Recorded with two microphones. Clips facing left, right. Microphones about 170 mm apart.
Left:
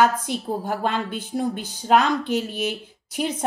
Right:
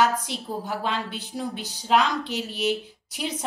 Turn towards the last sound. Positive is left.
turn(degrees=50)  # may be behind; listen again after turning